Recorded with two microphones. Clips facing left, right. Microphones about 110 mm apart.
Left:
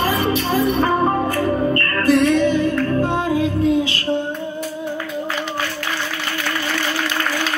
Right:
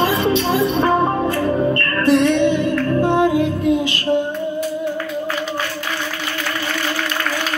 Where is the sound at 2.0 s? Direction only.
25° right (ahead or behind).